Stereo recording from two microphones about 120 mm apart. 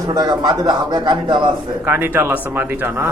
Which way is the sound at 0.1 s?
35° right (ahead or behind).